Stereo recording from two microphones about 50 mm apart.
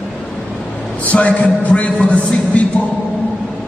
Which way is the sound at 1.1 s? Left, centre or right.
Left.